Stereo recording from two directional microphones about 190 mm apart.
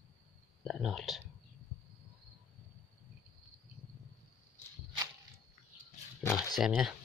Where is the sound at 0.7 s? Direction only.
Centre (ahead or behind).